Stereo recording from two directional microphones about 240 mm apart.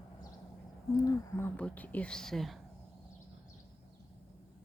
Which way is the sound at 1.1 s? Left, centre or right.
Centre.